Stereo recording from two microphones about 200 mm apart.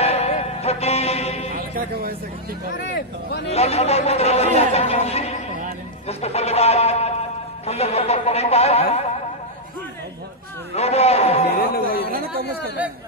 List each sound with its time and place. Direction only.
0.0 s music: 30° left (ahead or behind)
3.4 s speech: 30° left (ahead or behind)
10.7 s speech: 30° left (ahead or behind)
11.7 s speech: 50° left (ahead or behind)